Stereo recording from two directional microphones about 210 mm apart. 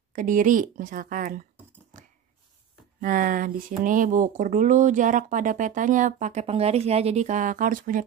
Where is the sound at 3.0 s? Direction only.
40° right (ahead or behind).